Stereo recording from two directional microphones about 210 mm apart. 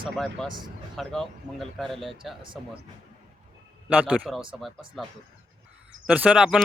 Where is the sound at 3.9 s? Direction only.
5° right (ahead or behind).